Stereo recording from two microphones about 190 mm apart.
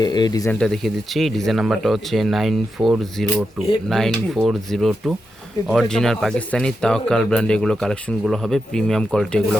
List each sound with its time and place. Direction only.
0.0 s speech: 20° left (ahead or behind)
0.6 s speech: centre (ahead or behind)